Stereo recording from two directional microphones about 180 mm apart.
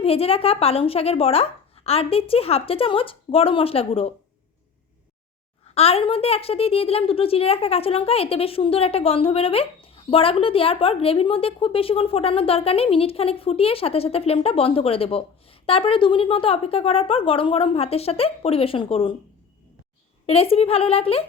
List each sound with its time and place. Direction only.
0.0 s a woman's voice: 35° left (ahead or behind)
5.7 s a woman's voice: 35° left (ahead or behind)
20.2 s a woman's voice: 35° left (ahead or behind)